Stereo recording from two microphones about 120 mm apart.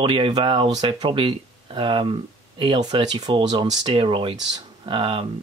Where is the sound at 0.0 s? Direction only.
45° right (ahead or behind).